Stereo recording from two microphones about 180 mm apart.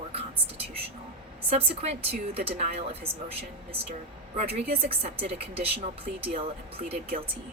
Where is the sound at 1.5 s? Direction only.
35° right (ahead or behind).